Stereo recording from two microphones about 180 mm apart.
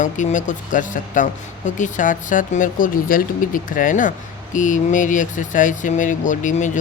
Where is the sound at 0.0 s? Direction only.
45° left (ahead or behind).